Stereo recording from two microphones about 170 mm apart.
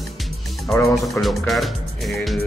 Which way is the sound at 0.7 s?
Centre (ahead or behind).